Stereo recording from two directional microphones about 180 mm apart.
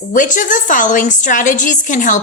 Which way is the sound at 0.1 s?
45° left (ahead or behind).